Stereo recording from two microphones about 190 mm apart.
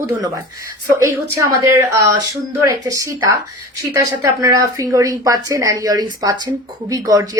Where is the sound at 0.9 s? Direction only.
15° right (ahead or behind).